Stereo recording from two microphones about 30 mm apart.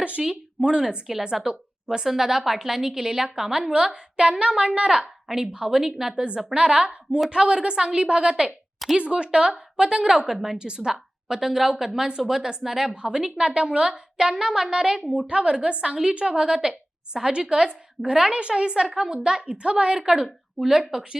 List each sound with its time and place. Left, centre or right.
0.2 s a woman's voice: right
2.0 s a woman's voice: centre
3.7 s a woman's voice: right
4.9 s a woman's voice: centre
6.1 s a woman's voice: right; by 10.6 s centre
10.6 s a woman's voice: right
10.9 s a woman's voice: centre; by 16.4 s right
16.4 s a woman's voice: right
18.3 s a woman's voice: right
20.6 s a woman's voice: centre